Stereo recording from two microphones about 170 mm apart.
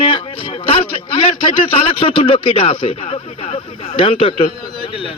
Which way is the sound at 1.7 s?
30° left (ahead or behind).